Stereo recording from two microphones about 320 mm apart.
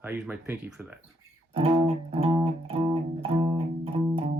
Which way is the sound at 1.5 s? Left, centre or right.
Centre.